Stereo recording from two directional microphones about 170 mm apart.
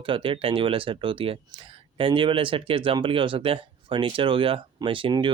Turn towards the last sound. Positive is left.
turn(degrees=-30)  # may be behind; listen again after turning